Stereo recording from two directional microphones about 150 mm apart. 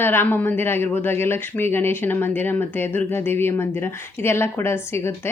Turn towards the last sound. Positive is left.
turn(degrees=15)  # may be behind; listen again after turning